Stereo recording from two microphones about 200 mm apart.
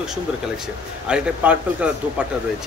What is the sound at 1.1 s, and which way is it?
Speech, 10° right (ahead or behind).